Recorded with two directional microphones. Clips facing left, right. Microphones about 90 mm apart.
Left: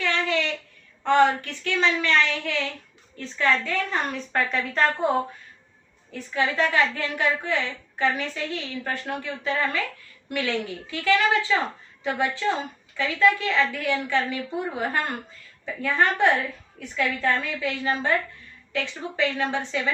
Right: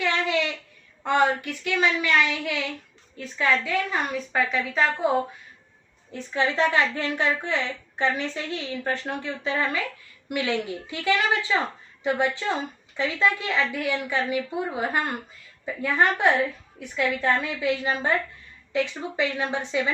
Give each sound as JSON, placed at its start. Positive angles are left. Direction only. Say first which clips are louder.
{"t": 0.0, "sound": "a sound", "louder": "right 1 dB", "side_deg": -15}
{"t": 1.0, "sound": "a woman's voice", "louder": "left 3 dB", "side_deg": -15}
{"t": 6.1, "sound": "a woman's voice", "louder": "even", "side_deg": -20}